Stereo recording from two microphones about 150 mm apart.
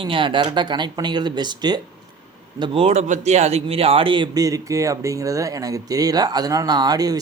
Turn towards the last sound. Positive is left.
turn(degrees=-25)  # may be behind; listen again after turning